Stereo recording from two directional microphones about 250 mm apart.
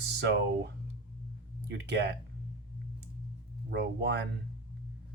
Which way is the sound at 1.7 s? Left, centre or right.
Right.